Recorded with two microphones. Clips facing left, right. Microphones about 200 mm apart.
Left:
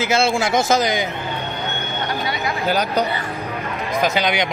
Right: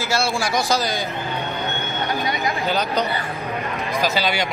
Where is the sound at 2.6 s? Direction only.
10° left (ahead or behind).